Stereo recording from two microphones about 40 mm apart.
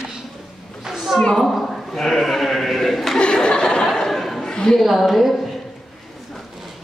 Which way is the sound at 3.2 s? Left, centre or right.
Left.